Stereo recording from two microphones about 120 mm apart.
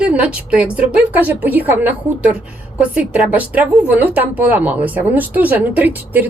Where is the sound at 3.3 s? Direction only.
15° right (ahead or behind).